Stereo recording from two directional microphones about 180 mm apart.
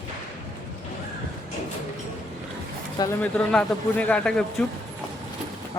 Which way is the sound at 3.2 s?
5° left (ahead or behind).